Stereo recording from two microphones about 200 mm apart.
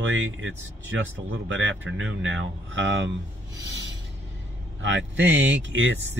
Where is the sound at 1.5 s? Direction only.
70° right (ahead or behind).